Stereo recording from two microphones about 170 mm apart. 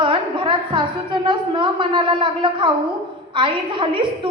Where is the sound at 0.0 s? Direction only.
30° right (ahead or behind).